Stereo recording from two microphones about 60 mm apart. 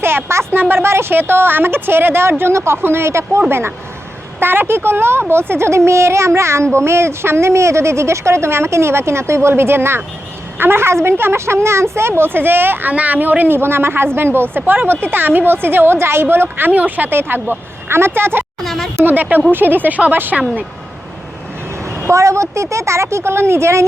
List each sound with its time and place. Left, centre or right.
0.0 s a sound: right
0.6 s a woman's voice: right
2.4 s speech: right
4.4 s a woman's voice: right
12.9 s a woman's voice: right
18.6 s a sound: centre
19.0 s a sound: right
19.5 s a woman's voice: right
22.0 s speech: right